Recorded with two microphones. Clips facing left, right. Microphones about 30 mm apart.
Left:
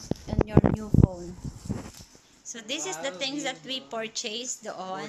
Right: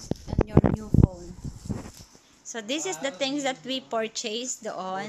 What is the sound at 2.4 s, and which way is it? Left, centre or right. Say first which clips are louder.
A woman's voice: right 4 dB; centre.